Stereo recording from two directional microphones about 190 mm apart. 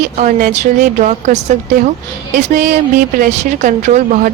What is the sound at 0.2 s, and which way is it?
A woman's voice, 45° right (ahead or behind).